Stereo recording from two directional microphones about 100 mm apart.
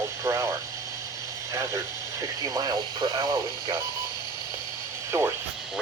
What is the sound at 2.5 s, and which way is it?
Speech, 40° right (ahead or behind).